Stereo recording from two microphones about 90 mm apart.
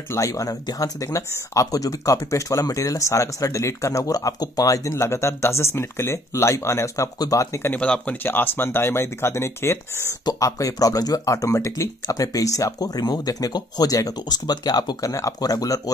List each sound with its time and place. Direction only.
0.1 s speech: 40° left (ahead or behind)
7.7 s speech: 10° left (ahead or behind); by 10.0 s 30° left (ahead or behind)
10.2 s speech: 40° left (ahead or behind)